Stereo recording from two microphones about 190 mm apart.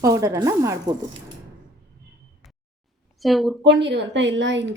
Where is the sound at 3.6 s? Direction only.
65° right (ahead or behind).